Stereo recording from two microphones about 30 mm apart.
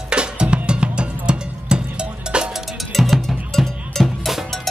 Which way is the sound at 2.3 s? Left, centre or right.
Right.